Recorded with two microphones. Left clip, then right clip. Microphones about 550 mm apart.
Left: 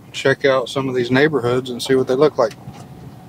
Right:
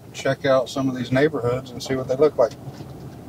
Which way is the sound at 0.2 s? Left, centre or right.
Left.